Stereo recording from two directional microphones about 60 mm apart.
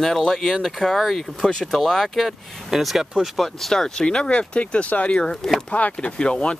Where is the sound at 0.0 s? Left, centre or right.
Centre.